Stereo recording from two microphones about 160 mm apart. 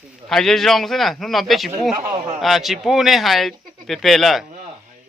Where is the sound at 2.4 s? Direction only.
Centre (ahead or behind).